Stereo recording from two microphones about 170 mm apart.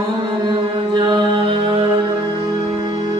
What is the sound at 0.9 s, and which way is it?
Mantra, 25° right (ahead or behind).